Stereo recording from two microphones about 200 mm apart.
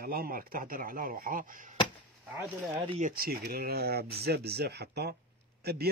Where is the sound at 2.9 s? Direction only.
40° right (ahead or behind).